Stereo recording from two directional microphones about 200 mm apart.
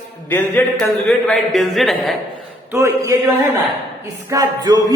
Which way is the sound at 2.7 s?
15° right (ahead or behind).